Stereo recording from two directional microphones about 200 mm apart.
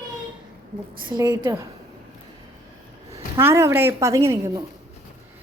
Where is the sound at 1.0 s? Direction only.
20° right (ahead or behind).